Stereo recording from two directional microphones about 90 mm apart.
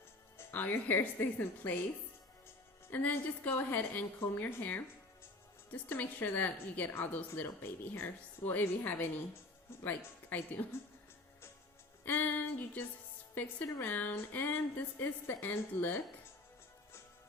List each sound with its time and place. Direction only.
0.3 s a woman's voice: 25° left (ahead or behind)
2.9 s a woman's voice: 20° left (ahead or behind)
12.0 s music: 20° left (ahead or behind)
13.4 s a woman's voice: 20° left (ahead or behind)